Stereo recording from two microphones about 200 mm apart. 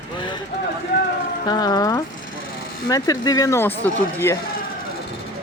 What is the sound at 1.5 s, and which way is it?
Speech, 20° left (ahead or behind).